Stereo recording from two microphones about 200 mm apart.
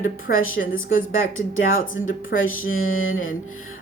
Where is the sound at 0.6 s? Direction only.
80° left.